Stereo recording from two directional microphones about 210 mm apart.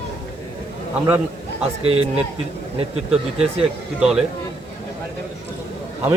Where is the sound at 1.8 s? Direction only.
30° right (ahead or behind).